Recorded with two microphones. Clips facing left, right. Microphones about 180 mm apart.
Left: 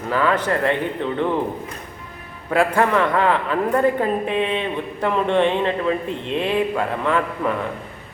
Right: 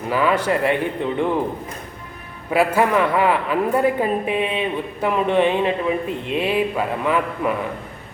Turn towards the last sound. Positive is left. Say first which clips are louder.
# even
turn(degrees=-10)  # may be behind; listen again after turning